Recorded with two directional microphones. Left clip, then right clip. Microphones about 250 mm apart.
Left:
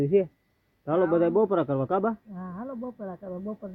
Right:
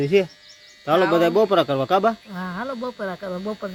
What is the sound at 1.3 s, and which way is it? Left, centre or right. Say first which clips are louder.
Speech: right 6 dB; centre.